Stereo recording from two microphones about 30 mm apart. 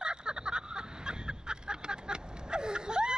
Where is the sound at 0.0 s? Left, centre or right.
Right.